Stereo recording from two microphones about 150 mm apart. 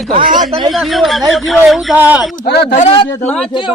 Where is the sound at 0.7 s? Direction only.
Centre (ahead or behind).